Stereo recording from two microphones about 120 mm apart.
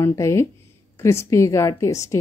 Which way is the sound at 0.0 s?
25° left (ahead or behind).